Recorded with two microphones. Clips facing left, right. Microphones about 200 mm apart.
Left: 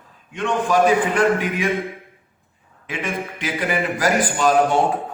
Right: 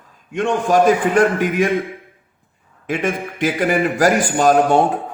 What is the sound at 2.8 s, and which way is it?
A man's voice, 45° right (ahead or behind).